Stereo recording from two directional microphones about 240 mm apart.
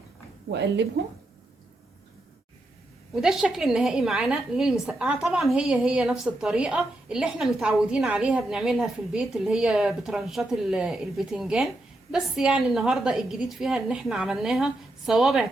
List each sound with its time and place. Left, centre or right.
0.5 s a woman's voice: right
3.2 s a woman's voice: centre